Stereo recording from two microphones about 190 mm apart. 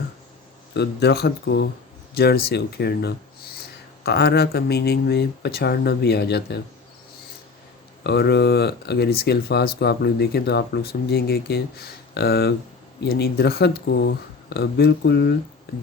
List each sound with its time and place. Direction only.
0.7 s speech: 60° left (ahead or behind)
8.0 s speech: 60° left (ahead or behind)